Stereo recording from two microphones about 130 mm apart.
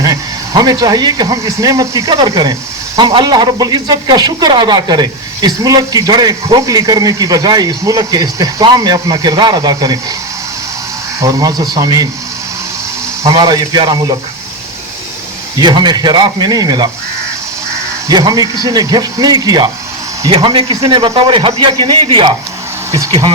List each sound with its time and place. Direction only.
0.0 s speech: 30° right (ahead or behind)
11.2 s speech: 30° right (ahead or behind)
13.2 s speech: 30° right (ahead or behind)
15.6 s speech: 35° right (ahead or behind)
18.1 s speech: 30° right (ahead or behind)
20.3 s speech: 45° right (ahead or behind)